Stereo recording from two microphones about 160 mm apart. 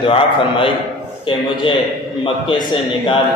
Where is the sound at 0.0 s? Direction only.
35° left (ahead or behind).